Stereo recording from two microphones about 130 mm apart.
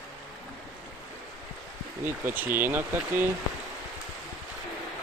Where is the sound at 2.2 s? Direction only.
15° right (ahead or behind).